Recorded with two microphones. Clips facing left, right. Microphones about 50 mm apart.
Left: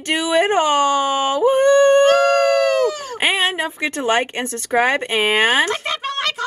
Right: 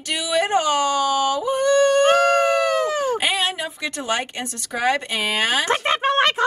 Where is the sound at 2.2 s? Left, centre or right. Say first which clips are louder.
Left 3 dB; right.